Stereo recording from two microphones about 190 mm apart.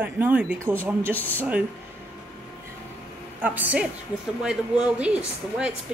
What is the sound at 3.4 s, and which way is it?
A woman's voice, 10° right (ahead or behind).